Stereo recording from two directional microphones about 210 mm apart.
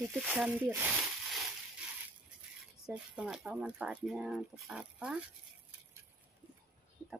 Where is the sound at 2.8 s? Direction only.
5° right (ahead or behind).